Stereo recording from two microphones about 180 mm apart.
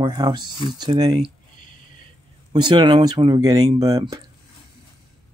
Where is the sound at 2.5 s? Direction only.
25° right (ahead or behind).